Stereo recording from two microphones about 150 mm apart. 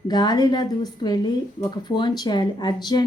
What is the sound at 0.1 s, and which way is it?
A woman's voice, 30° left (ahead or behind).